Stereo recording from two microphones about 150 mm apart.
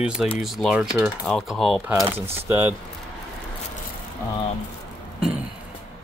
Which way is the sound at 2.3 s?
15° right (ahead or behind).